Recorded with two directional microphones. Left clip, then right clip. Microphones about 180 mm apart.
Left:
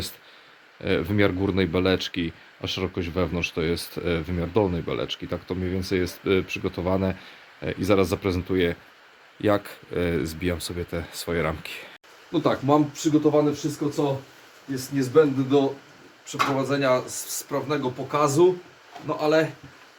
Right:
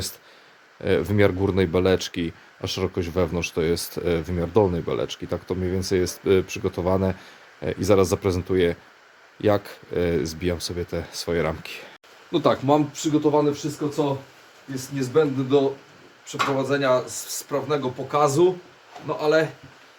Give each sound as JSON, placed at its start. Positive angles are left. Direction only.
{"t": 0.8, "sound": "speech", "side_deg": -15}
{"t": 12.3, "sound": "speech", "side_deg": -55}
{"t": 14.9, "sound": "speech", "side_deg": -15}